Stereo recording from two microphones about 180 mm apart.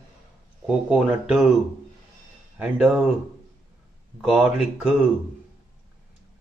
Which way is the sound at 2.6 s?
5° right (ahead or behind).